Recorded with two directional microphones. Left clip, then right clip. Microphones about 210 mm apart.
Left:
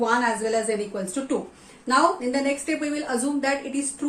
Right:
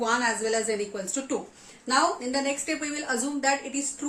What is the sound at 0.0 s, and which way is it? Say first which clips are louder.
A woman's voice: left 3 dB; 25° right (ahead or behind).